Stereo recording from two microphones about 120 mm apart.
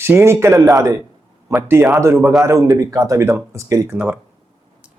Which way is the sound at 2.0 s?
20° right (ahead or behind).